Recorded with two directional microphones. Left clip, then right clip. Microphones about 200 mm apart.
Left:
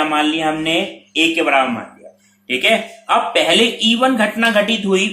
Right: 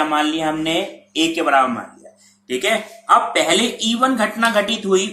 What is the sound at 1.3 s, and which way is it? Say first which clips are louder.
Speech: left 1 dB; 35° left (ahead or behind).